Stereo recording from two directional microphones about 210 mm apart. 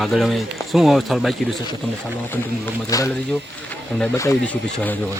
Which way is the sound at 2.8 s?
15° left (ahead or behind).